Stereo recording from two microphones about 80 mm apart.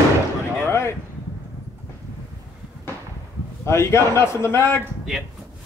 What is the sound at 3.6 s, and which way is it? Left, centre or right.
Speech, left.